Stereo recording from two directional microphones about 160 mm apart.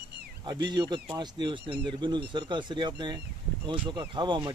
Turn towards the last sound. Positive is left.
turn(degrees=-30)  # may be behind; listen again after turning